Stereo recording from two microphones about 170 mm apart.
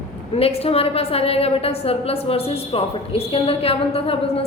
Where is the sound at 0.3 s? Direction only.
35° left (ahead or behind).